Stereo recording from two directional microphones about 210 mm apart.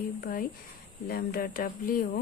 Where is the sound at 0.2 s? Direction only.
40° left (ahead or behind).